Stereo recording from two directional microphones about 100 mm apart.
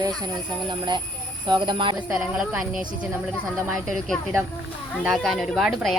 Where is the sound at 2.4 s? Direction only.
10° right (ahead or behind).